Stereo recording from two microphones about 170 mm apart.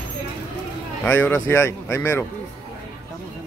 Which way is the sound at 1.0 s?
10° left (ahead or behind).